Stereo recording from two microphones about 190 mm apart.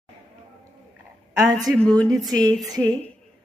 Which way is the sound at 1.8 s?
5° left (ahead or behind).